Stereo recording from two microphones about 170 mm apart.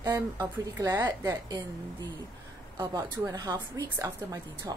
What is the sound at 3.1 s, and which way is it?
A woman's voice, 20° right (ahead or behind).